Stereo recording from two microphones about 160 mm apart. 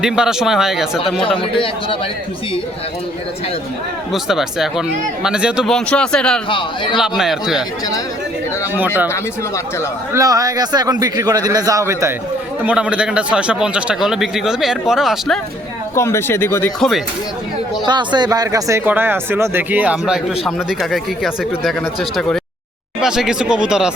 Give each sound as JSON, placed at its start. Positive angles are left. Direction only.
{"t": 0.0, "sound": "a man's voice", "side_deg": -5}
{"t": 1.2, "sound": "a man's voice", "side_deg": 35}
{"t": 4.1, "sound": "a man's voice", "side_deg": 0}
{"t": 6.5, "sound": "a man's voice", "side_deg": 30}
{"t": 7.0, "sound": "a man's voice", "side_deg": -5}
{"t": 10.1, "sound": "a man's voice", "side_deg": -20}
{"t": 12.6, "sound": "a man's voice", "side_deg": -5}
{"t": 16.0, "sound": "speech", "side_deg": 15}
{"t": 17.8, "sound": "a man's voice", "side_deg": -25}